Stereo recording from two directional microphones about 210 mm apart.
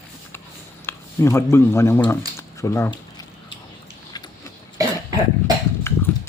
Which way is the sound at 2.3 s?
15° left (ahead or behind).